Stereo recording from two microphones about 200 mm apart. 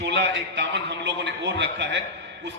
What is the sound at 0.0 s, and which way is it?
A man's voice, 60° right (ahead or behind).